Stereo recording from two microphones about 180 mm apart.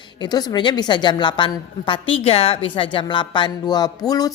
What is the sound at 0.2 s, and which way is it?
A woman's voice, 25° left (ahead or behind).